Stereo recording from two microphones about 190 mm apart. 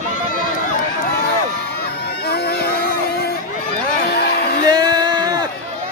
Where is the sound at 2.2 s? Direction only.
55° left (ahead or behind).